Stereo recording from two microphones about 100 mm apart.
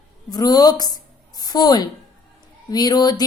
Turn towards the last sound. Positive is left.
turn(degrees=40)  # may be behind; listen again after turning